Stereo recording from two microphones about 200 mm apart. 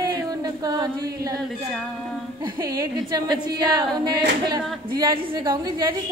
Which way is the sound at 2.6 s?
20° right (ahead or behind).